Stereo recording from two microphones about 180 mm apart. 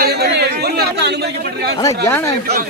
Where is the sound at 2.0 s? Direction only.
10° left (ahead or behind).